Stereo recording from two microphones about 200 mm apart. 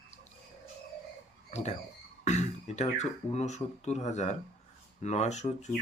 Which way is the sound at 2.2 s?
35° left (ahead or behind).